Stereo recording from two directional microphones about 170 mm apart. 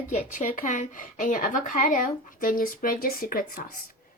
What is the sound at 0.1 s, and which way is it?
A woman's voice, 45° left (ahead or behind).